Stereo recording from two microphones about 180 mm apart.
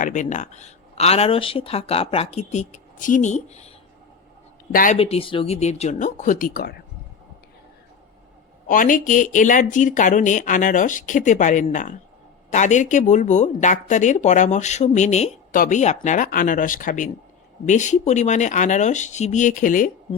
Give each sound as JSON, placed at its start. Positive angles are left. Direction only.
{"t": 0.0, "sound": "speech", "side_deg": 45}
{"t": 4.7, "sound": "speech", "side_deg": 50}
{"t": 4.9, "sound": "speech", "side_deg": 35}
{"t": 8.6, "sound": "speech", "side_deg": 50}